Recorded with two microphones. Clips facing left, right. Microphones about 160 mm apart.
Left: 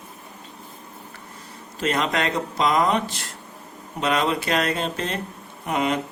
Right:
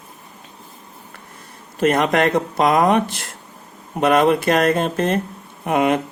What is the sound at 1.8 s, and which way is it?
Speech, 55° right (ahead or behind).